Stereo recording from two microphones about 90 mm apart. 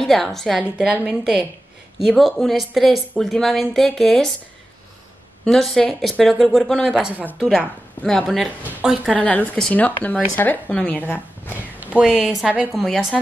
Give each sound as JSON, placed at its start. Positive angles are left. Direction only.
{"t": 0.0, "sound": "speech", "side_deg": 5}
{"t": 0.9, "sound": "a woman's voice", "side_deg": -10}
{"t": 5.4, "sound": "speech", "side_deg": 5}
{"t": 6.9, "sound": "a woman's voice", "side_deg": -15}
{"t": 7.4, "sound": "speech", "side_deg": 5}
{"t": 9.1, "sound": "speech", "side_deg": 15}
{"t": 11.8, "sound": "speech", "side_deg": -10}